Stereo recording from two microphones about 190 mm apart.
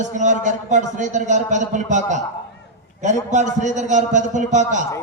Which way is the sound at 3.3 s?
40° right (ahead or behind).